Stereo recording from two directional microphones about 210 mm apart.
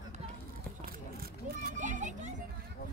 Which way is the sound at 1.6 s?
35° right (ahead or behind).